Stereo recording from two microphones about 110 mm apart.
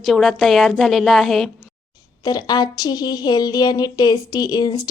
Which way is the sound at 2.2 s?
40° left (ahead or behind).